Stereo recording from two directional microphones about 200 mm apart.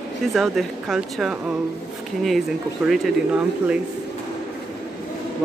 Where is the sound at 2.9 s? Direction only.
Centre (ahead or behind).